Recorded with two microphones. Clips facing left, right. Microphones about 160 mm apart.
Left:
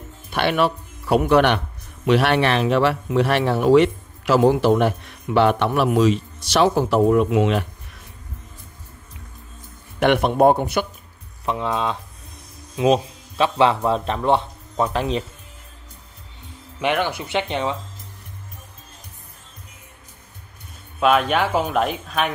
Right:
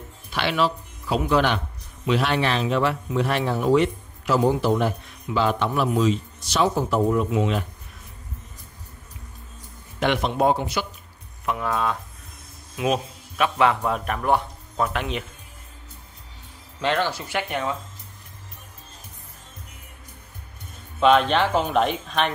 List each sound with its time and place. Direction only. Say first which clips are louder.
0.3 s speech: left 4 dB; 55° left (ahead or behind); by 7.6 s 70° left (ahead or behind)
9.9 s a man's voice: left 5 dB; 60° left (ahead or behind)
11.4 s speech: left 2 dB; 25° left (ahead or behind)
16.8 s speech: left 2 dB; 15° left (ahead or behind)
21.0 s speech: even; 5° left (ahead or behind)